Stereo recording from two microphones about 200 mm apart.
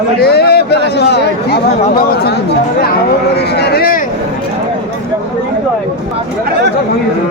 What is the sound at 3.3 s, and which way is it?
Speech, 55° left (ahead or behind).